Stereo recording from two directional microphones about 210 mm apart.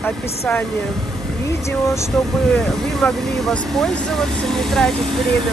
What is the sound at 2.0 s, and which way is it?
Speech, centre (ahead or behind).